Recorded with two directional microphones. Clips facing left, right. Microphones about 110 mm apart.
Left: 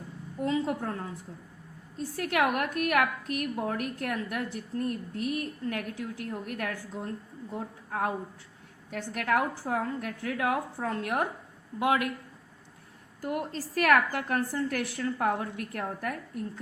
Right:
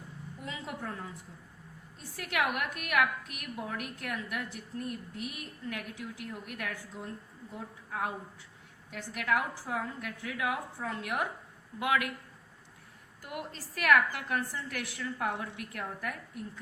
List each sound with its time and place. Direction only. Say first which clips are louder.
0.4 s a woman's voice: left 11 dB; 35° left (ahead or behind)
13.2 s a woman's voice: left 8 dB; 40° left (ahead or behind)